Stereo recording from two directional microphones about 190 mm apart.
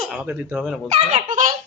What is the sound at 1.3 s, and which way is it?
Speech, 40° right (ahead or behind).